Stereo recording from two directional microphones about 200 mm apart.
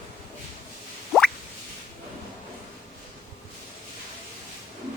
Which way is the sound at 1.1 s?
Centre (ahead or behind).